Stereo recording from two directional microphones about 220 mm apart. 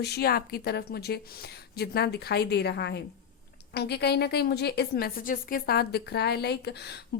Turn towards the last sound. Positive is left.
turn(degrees=50)  # may be behind; listen again after turning